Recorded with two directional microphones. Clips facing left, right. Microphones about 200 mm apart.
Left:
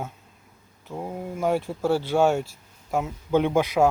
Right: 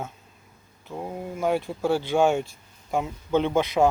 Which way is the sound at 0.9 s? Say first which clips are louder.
Left 1 dB; centre (ahead or behind).